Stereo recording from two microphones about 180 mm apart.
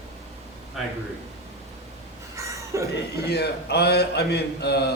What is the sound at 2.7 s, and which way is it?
Speech, 15° right (ahead or behind).